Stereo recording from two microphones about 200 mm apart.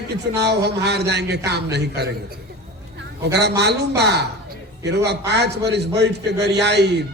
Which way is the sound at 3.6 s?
55° right (ahead or behind).